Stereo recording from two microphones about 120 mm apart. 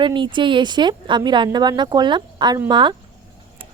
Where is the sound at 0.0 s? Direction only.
40° right (ahead or behind).